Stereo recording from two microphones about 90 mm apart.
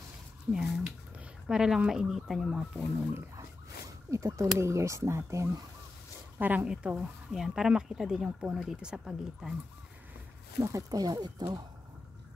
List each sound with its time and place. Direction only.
0.5 s speech: 5° right (ahead or behind)
4.1 s speech: 35° right (ahead or behind)
6.3 s speech: 20° right (ahead or behind)
10.6 s speech: 30° right (ahead or behind)
10.9 s speech: 45° right (ahead or behind)